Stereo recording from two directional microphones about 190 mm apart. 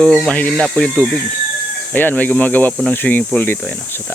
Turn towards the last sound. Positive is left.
turn(degrees=10)  # may be behind; listen again after turning